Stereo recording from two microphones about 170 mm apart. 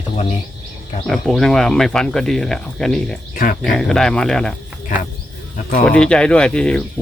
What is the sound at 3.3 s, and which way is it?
Speech, 55° left (ahead or behind).